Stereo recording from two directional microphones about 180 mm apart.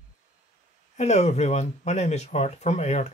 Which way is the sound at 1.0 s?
40° left (ahead or behind).